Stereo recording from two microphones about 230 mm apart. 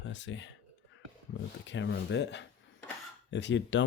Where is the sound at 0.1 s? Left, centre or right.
Left.